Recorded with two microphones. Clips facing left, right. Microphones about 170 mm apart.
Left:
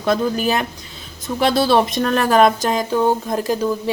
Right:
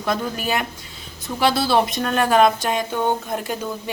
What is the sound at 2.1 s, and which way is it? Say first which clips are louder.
Speech: left 2 dB; 40° left (ahead or behind).